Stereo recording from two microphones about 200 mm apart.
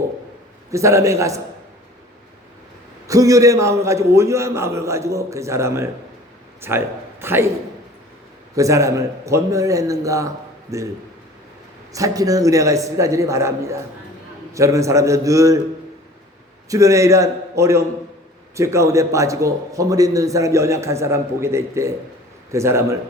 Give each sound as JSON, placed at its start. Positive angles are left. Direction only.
{"t": 0.7, "sound": "a man's voice", "side_deg": -15}
{"t": 3.1, "sound": "a man's voice", "side_deg": -15}
{"t": 8.5, "sound": "a man's voice", "side_deg": -15}
{"t": 11.9, "sound": "a man's voice", "side_deg": -15}
{"t": 16.6, "sound": "a man's voice", "side_deg": -15}